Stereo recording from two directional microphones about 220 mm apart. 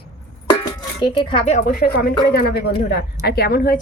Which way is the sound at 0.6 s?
20° left (ahead or behind).